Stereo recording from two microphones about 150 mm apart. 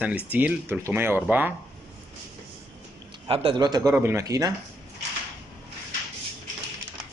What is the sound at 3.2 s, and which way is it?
Speech, 35° right (ahead or behind).